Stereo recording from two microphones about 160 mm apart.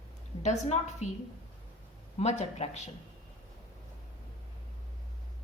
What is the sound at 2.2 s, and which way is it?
Speech, 45° left (ahead or behind).